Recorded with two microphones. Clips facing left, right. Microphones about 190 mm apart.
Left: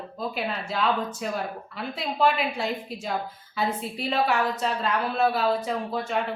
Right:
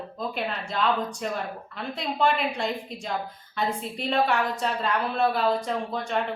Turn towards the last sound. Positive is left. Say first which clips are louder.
# even
turn(degrees=5)  # may be behind; listen again after turning